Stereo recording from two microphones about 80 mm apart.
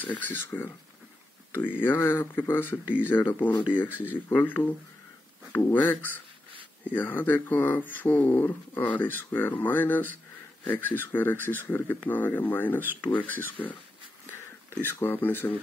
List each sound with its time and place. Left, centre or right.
0.0 s speech: left
1.8 s speech: left